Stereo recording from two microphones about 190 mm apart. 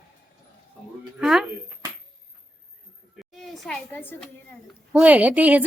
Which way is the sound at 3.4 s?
5° left (ahead or behind).